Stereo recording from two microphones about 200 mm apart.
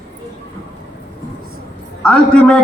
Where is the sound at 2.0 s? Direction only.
5° left (ahead or behind).